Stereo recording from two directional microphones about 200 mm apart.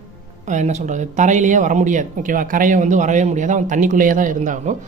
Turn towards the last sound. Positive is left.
turn(degrees=-40)  # may be behind; listen again after turning